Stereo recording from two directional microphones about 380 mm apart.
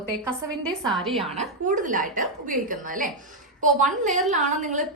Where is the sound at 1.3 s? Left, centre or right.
Centre.